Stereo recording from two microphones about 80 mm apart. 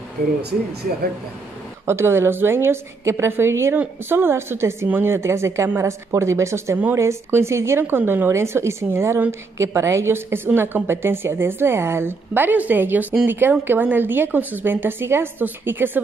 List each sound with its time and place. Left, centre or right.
1.9 s a woman's voice: right